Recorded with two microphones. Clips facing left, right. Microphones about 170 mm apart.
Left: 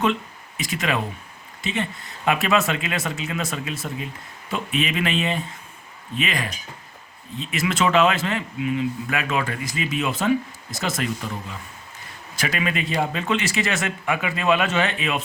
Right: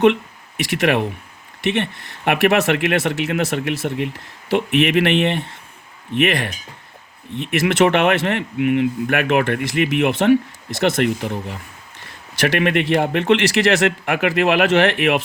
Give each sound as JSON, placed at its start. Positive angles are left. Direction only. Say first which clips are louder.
{"t": 0.0, "sound": "speech", "louder": "right 8 dB", "side_deg": -65}